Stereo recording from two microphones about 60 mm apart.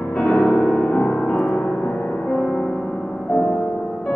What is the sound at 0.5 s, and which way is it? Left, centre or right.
Music, left.